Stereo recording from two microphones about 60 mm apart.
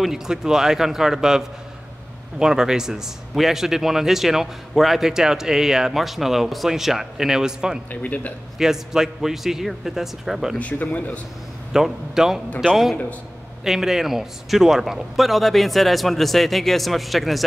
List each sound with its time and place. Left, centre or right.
0.0 s speech: centre
7.9 s speech: left
8.5 s a man's voice: centre
10.6 s speech: left
11.7 s speech: centre
13.7 s a man's voice: centre